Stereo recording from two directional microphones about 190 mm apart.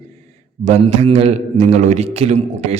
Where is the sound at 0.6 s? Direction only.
35° right (ahead or behind).